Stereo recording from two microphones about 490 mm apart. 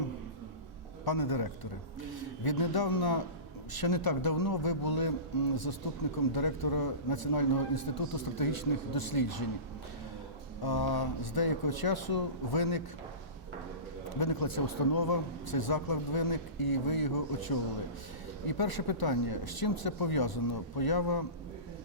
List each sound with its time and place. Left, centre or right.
1.0 s a man's voice: left
10.6 s a man's voice: left
14.1 s a man's voice: left